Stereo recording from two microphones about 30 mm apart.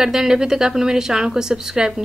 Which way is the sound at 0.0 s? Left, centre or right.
Centre.